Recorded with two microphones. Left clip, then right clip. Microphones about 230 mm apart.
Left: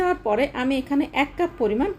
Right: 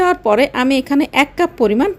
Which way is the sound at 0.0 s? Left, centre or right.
Right.